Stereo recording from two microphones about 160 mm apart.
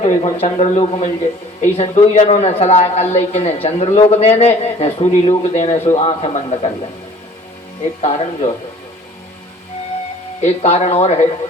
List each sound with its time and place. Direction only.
0.0 s a man's voice: 40° left (ahead or behind)
8.0 s a man's voice: 40° left (ahead or behind)
10.4 s speech: 40° left (ahead or behind)